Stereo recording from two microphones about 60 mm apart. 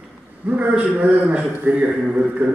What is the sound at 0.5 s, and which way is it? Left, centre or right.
A man's voice, right.